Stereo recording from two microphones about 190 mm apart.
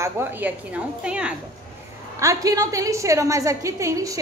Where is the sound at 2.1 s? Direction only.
15° right (ahead or behind).